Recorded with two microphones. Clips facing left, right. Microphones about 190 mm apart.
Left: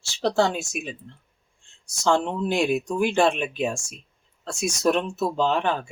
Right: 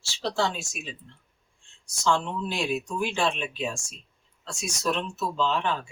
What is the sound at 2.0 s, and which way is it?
Speech, 50° left (ahead or behind).